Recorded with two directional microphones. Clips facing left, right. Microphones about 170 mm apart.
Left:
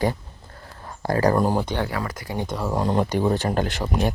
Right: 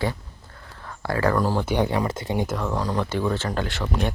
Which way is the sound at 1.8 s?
25° right (ahead or behind).